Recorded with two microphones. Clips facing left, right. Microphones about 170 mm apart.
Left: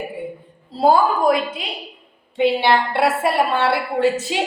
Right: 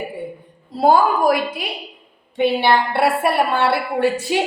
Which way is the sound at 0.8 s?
30° left (ahead or behind).